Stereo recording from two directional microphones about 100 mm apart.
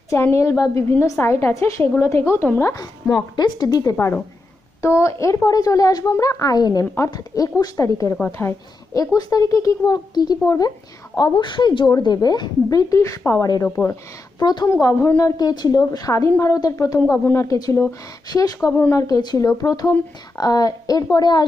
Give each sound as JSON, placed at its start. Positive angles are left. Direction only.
{"t": 0.1, "sound": "a woman's voice", "side_deg": 30}
{"t": 2.7, "sound": "a woman's voice", "side_deg": 40}
{"t": 3.9, "sound": "a woman's voice", "side_deg": 25}
{"t": 9.0, "sound": "a woman's voice", "side_deg": 35}
{"t": 14.8, "sound": "a woman's voice", "side_deg": 30}
{"t": 18.7, "sound": "a woman's voice", "side_deg": 20}
{"t": 18.9, "sound": "a woman's voice", "side_deg": 35}